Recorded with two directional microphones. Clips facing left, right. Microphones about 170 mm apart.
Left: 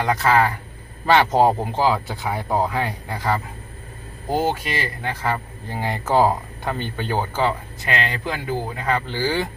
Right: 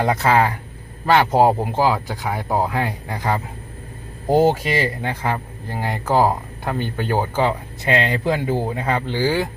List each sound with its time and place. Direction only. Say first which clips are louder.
0.0 s speech: right 1 dB; 25° right (ahead or behind)
4.3 s speech: right 6 dB; 35° right (ahead or behind)
5.0 s speech: right 1 dB; 15° right (ahead or behind)
5.8 s speech: even; centre (ahead or behind)
7.9 s speech: right 6 dB; 25° right (ahead or behind)